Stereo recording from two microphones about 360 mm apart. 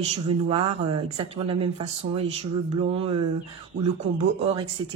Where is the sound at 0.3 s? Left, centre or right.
Centre.